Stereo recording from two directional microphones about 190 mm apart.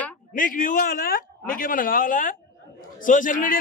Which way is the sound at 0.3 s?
45° left (ahead or behind).